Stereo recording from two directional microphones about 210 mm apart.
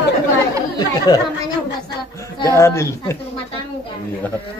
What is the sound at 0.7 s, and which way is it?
Speech, 20° left (ahead or behind).